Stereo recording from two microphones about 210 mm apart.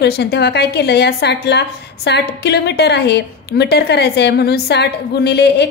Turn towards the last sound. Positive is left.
turn(degrees=50)  # may be behind; listen again after turning